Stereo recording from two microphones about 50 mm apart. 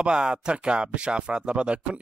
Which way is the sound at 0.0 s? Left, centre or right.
Centre.